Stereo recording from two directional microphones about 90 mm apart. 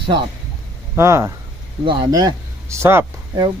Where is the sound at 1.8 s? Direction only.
50° right (ahead or behind).